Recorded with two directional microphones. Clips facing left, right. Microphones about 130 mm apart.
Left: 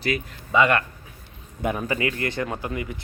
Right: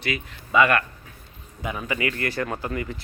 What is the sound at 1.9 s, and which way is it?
Speech, 25° left (ahead or behind).